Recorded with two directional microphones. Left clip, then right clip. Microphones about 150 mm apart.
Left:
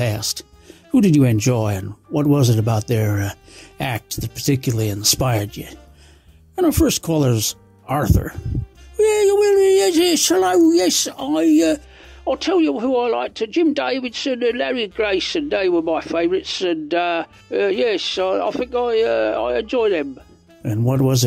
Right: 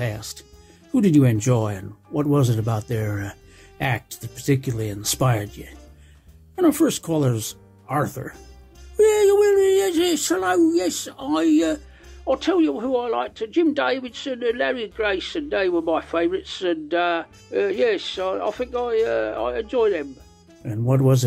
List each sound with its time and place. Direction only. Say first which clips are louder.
0.0 s speech: left 7 dB; 40° left (ahead or behind)
8.9 s speech: left 1 dB; 25° left (ahead or behind)
12.3 s speech: left 2 dB; 45° left (ahead or behind)